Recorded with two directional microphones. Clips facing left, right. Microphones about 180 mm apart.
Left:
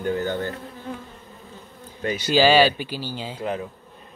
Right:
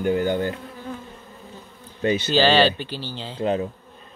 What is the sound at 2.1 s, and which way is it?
Speech, 10° left (ahead or behind).